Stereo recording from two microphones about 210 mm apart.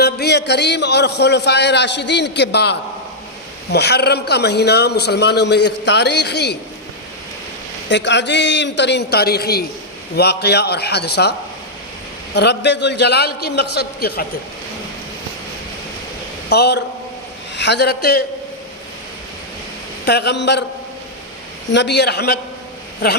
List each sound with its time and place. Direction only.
0.0 s a man's voice: 50° left (ahead or behind)
7.9 s a man's voice: 55° left (ahead or behind)
16.5 s a man's voice: 50° left (ahead or behind)
20.1 s a man's voice: 50° left (ahead or behind)
21.7 s a man's voice: 55° left (ahead or behind)